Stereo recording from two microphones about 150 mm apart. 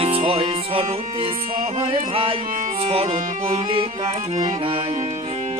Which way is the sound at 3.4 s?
35° right (ahead or behind).